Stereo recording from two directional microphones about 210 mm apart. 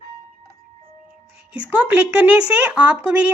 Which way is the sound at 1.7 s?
10° right (ahead or behind).